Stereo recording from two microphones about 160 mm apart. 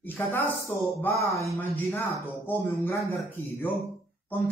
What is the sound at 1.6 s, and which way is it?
A man's voice, 15° left (ahead or behind).